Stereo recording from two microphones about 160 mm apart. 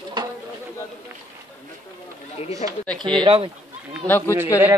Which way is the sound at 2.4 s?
40° left (ahead or behind).